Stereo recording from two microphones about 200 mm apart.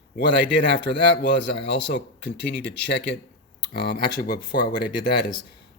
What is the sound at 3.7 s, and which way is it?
Speech, 50° left (ahead or behind).